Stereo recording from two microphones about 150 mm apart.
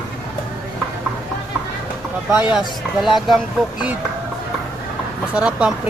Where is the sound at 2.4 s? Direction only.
5° right (ahead or behind).